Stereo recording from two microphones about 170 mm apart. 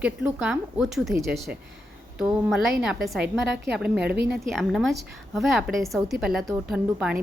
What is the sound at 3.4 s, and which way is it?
Speech, 90° right.